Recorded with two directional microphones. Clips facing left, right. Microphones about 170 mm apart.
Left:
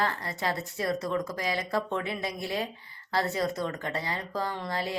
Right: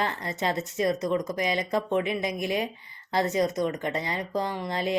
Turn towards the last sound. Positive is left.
turn(degrees=-20)  # may be behind; listen again after turning